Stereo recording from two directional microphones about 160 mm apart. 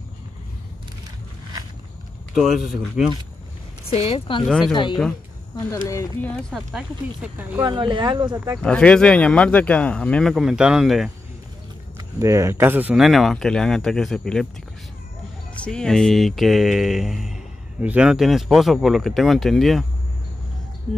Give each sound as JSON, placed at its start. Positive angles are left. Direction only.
{"t": 2.3, "sound": "speech", "side_deg": 0}
{"t": 3.9, "sound": "speech", "side_deg": 40}
{"t": 4.5, "sound": "speech", "side_deg": 0}
{"t": 5.9, "sound": "speech", "side_deg": 20}
{"t": 6.5, "sound": "speech", "side_deg": -5}
{"t": 7.6, "sound": "speech", "side_deg": -30}
{"t": 8.6, "sound": "speech", "side_deg": 5}
{"t": 12.2, "sound": "speech", "side_deg": -20}
{"t": 15.5, "sound": "speech", "side_deg": 5}